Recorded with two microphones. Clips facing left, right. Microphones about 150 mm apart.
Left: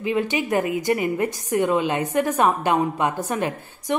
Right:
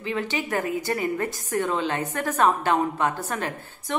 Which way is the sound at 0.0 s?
15° left (ahead or behind).